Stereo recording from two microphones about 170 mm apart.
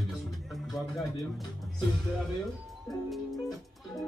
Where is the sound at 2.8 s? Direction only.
Centre (ahead or behind).